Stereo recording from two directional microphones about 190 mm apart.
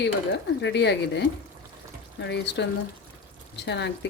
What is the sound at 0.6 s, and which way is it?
Speech, 65° left (ahead or behind).